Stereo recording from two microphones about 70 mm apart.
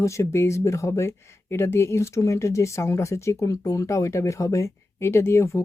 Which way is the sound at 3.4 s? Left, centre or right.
Left.